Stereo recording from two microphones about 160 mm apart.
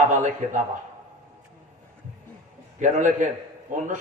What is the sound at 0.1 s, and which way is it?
Speech, 50° right (ahead or behind).